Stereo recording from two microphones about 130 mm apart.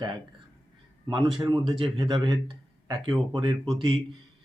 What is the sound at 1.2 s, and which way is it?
Speech, centre (ahead or behind).